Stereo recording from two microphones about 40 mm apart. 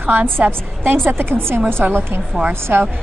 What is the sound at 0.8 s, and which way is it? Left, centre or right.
A woman's voice, right.